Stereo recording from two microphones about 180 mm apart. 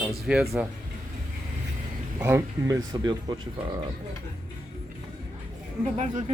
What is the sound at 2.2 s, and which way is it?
Speech, 15° right (ahead or behind).